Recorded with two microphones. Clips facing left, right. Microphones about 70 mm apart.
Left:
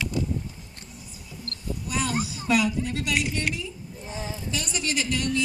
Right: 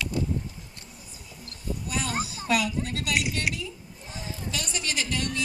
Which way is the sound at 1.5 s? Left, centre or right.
Centre.